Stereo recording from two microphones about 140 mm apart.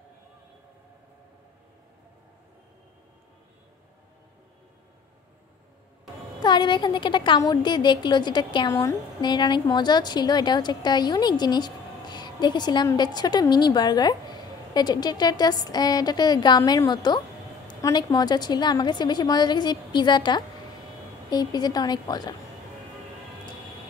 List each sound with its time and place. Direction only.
6.4 s a woman's voice: 35° left (ahead or behind)